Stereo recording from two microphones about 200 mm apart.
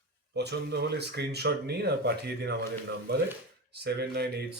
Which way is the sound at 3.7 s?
55° right (ahead or behind).